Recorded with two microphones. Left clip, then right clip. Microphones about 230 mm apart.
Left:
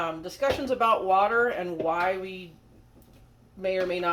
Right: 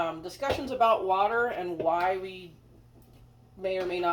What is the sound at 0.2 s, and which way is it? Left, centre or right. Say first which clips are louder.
Speech: left 4 dB; left.